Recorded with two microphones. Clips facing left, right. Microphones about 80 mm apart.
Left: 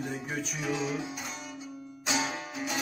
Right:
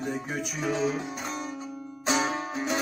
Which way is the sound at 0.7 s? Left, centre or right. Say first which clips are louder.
Right 4 dB; right.